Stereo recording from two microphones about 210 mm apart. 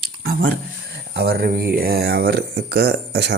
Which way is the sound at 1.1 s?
50° right (ahead or behind).